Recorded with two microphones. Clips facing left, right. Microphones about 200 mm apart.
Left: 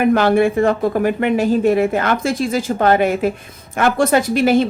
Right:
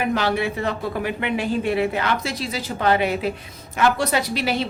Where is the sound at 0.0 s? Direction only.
50° left (ahead or behind).